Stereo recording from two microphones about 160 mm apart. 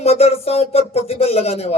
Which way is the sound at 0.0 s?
40° left (ahead or behind).